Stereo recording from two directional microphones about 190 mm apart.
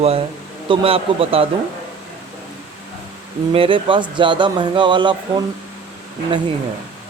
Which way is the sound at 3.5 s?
30° right (ahead or behind).